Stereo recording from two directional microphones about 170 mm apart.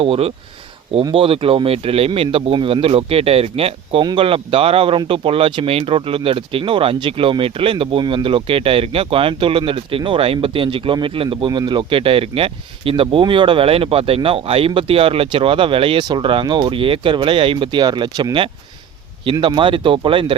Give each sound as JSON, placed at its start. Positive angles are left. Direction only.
{"t": 0.0, "sound": "speech", "side_deg": -35}